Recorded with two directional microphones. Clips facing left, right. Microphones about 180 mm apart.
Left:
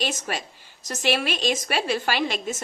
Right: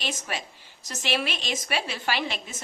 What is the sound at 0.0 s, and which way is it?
A woman's voice, 45° left (ahead or behind).